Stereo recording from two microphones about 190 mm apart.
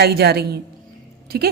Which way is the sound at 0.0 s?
55° right (ahead or behind).